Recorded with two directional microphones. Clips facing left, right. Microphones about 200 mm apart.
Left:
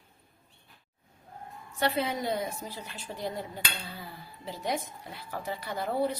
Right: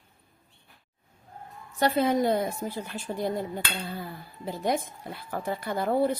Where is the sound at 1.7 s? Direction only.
40° right (ahead or behind).